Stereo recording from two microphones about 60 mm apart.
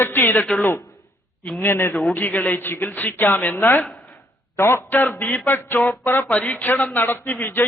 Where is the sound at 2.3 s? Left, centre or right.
Left.